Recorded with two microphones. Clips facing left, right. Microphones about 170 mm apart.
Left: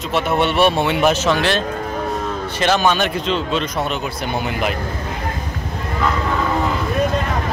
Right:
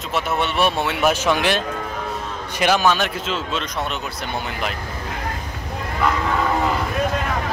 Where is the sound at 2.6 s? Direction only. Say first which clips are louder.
Left 1 dB; 5° right (ahead or behind).